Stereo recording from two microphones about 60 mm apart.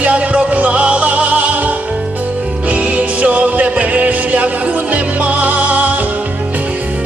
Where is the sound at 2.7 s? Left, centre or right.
Right.